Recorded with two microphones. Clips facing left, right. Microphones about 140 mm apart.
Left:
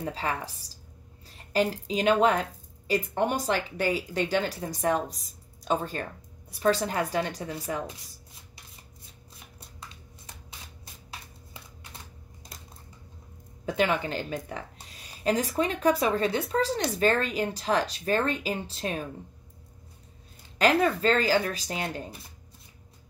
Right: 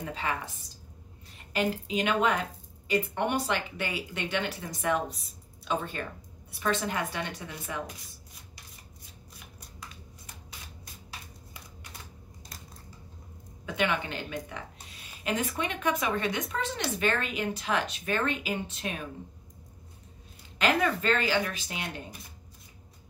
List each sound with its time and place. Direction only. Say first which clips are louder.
0.0 s a woman's voice: left 2 dB; 35° left (ahead or behind)
9.6 s shuffling cards: left 1 dB; 25° left (ahead or behind)
13.7 s a woman's voice: left 4 dB; 40° left (ahead or behind)
20.5 s a woman's voice: left 4 dB; 35° left (ahead or behind)